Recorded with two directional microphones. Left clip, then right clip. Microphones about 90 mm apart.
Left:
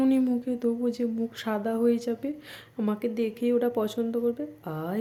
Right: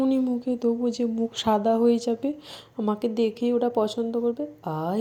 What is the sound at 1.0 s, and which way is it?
Speech, 25° right (ahead or behind).